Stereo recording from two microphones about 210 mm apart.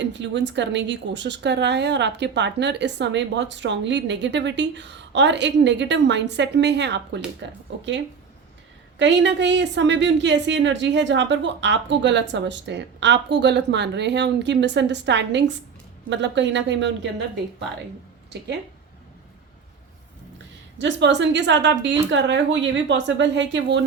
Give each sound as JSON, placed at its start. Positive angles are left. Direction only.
{"t": 0.0, "sound": "speech", "side_deg": -60}
{"t": 9.0, "sound": "speech", "side_deg": -60}
{"t": 20.7, "sound": "speech", "side_deg": -60}